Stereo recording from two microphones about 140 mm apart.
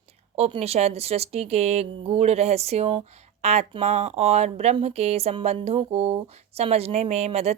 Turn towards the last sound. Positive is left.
turn(degrees=-50)  # may be behind; listen again after turning